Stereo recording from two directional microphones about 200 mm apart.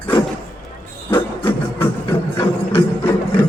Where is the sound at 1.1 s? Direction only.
10° left (ahead or behind).